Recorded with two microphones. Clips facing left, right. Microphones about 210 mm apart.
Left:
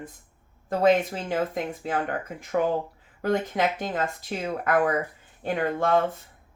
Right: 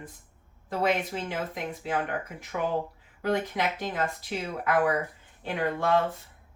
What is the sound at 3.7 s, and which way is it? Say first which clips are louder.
Speech: left 2 dB; 45° left (ahead or behind).